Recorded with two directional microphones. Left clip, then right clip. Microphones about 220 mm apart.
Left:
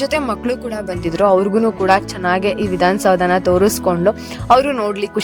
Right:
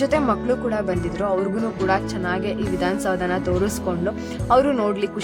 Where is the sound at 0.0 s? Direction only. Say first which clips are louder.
Left 2 dB; 35° left (ahead or behind).